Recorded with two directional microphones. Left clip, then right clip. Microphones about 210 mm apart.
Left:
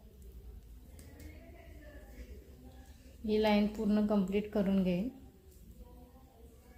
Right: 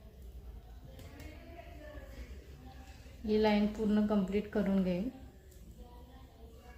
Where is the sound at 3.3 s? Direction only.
30° left (ahead or behind).